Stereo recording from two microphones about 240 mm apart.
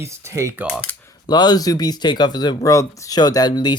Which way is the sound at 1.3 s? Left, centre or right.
Centre.